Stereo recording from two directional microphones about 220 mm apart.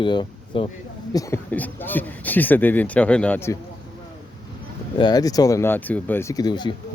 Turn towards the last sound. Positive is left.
turn(degrees=20)  # may be behind; listen again after turning